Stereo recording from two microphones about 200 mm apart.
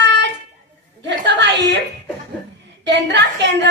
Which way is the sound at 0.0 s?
60° right (ahead or behind).